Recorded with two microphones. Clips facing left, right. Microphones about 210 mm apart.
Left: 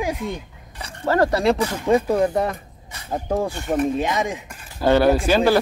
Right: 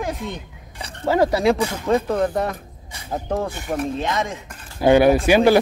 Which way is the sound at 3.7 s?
10° left (ahead or behind).